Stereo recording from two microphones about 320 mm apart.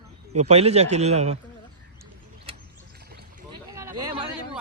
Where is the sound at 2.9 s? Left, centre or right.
Right.